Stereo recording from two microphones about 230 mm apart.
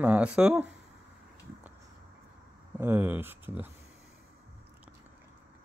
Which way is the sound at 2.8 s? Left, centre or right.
Centre.